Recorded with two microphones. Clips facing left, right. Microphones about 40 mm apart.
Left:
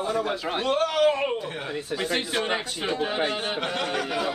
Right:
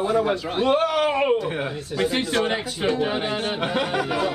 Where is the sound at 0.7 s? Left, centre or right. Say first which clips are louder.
Right 1 dB; centre.